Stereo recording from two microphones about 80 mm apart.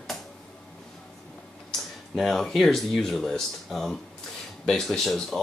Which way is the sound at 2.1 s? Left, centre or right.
Centre.